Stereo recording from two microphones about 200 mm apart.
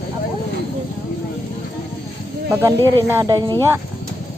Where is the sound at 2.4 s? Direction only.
15° right (ahead or behind).